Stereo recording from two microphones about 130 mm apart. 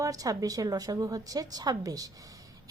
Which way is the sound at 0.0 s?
25° right (ahead or behind).